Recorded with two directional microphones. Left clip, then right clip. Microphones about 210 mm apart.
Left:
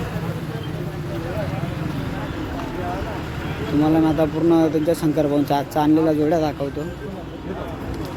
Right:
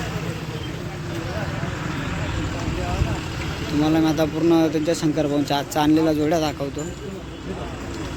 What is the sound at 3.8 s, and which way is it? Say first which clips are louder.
Speech: left 2 dB; 5° left (ahead or behind).